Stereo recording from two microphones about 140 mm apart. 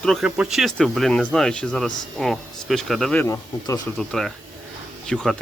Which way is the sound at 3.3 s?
25° left (ahead or behind).